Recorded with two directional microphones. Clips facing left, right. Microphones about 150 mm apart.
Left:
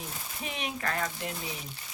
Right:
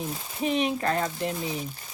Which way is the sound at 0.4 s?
30° right (ahead or behind).